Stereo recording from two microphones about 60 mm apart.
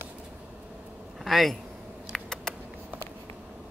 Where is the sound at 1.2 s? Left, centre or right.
Centre.